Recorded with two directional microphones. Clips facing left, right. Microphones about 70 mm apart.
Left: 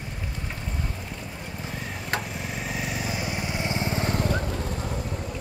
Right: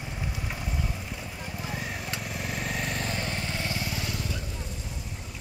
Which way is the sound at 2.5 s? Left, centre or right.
Centre.